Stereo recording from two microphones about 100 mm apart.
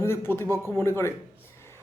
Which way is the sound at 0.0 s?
25° left (ahead or behind).